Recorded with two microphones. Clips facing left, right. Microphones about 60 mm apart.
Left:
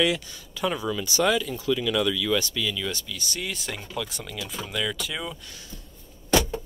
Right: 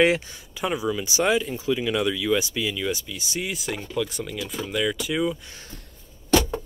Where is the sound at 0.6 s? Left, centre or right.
Centre.